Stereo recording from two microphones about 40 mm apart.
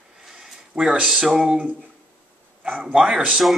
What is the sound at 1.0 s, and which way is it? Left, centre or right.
Speech, centre.